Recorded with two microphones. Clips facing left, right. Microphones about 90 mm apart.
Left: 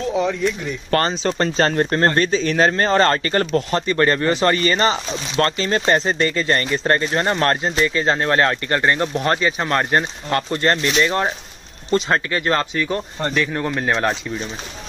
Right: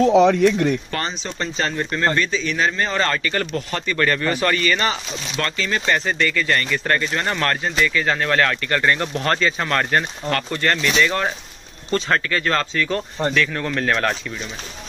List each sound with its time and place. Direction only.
0.0 s speech: 75° right (ahead or behind)
0.8 s speech: 55° left (ahead or behind); by 14.1 s 20° left (ahead or behind)